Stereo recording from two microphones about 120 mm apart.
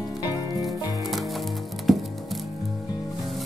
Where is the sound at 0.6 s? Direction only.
Centre (ahead or behind).